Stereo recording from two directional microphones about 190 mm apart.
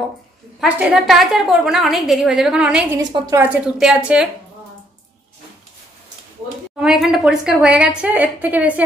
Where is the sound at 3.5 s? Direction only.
5° right (ahead or behind).